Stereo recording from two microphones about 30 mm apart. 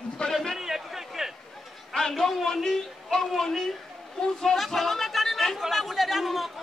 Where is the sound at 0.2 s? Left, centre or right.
Left.